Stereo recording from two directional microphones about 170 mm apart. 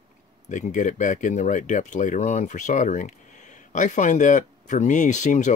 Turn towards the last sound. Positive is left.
turn(degrees=45)  # may be behind; listen again after turning